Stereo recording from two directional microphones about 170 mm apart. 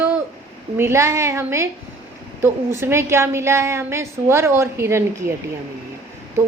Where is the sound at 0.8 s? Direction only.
15° right (ahead or behind).